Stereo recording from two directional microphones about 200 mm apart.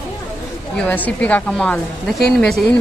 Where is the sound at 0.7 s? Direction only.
10° left (ahead or behind).